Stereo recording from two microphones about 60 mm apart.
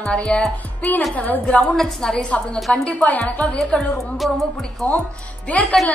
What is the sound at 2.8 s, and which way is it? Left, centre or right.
Speech, left.